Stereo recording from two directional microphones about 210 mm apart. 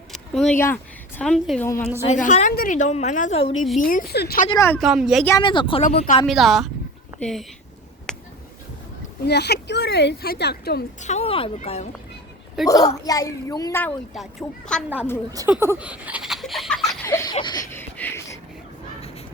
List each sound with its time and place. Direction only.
0.1 s speech: 5° left (ahead or behind)
2.0 s a woman's voice: 35° left (ahead or behind)
4.4 s a child's voice: 15° left (ahead or behind)
4.8 s speech: centre (ahead or behind)
5.4 s a woman's voice: 25° left (ahead or behind)
6.2 s speech: centre (ahead or behind)
8.1 s a sound: 5° left (ahead or behind)
9.2 s speech: 50° left (ahead or behind)
11.0 s a woman's voice: 30° left (ahead or behind)
12.6 s a child's voice: 15° left (ahead or behind)
15.3 s speech: 10° right (ahead or behind)
17.1 s a sound: 15° left (ahead or behind)
17.3 s a woman's voice: 20° left (ahead or behind)
17.7 s a sound: 10° left (ahead or behind)